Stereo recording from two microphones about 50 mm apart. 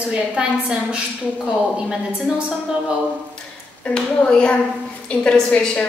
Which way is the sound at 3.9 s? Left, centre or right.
Left.